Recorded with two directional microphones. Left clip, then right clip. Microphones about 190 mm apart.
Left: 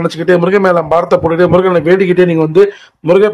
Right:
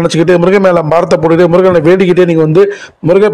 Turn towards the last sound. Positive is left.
turn(degrees=-30)  # may be behind; listen again after turning